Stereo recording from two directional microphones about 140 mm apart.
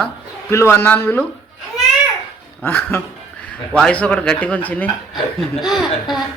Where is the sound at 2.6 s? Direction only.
15° left (ahead or behind).